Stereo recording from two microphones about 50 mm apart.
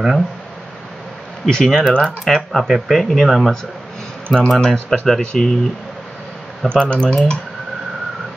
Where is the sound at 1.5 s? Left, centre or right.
Centre.